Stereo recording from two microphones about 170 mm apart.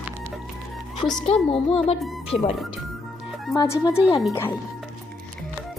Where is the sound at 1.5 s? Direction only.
35° left (ahead or behind).